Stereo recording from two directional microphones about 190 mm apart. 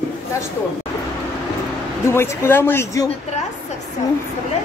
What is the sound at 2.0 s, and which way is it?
Speech, 15° left (ahead or behind).